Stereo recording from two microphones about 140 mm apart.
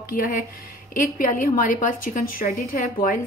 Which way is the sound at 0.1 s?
80° left.